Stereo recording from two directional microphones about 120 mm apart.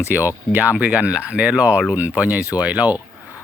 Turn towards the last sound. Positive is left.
turn(degrees=-15)  # may be behind; listen again after turning